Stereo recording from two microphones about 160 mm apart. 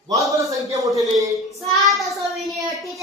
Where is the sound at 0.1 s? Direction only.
20° right (ahead or behind).